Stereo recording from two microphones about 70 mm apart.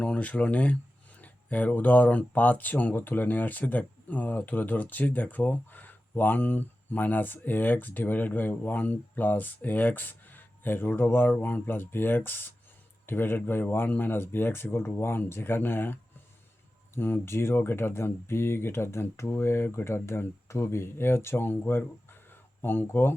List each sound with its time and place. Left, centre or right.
0.0 s speech: centre; by 23.1 s left